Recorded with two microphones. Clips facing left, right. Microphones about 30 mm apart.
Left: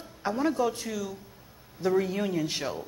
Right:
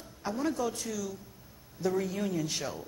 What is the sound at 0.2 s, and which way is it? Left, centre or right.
A woman's voice, left.